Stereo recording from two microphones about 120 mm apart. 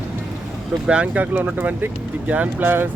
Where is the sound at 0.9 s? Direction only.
10° right (ahead or behind).